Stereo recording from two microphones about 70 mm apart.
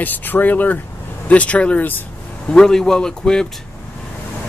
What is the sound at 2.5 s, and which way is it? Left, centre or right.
Speech, centre.